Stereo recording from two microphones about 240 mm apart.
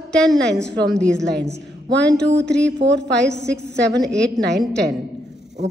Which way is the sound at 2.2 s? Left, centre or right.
Right.